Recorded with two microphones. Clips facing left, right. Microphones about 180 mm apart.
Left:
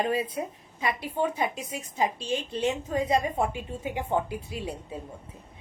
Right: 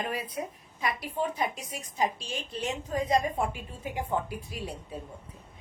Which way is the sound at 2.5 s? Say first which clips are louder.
Left 2 dB; 25° left (ahead or behind).